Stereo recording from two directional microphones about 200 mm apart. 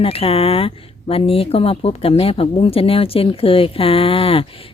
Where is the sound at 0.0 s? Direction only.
30° left (ahead or behind).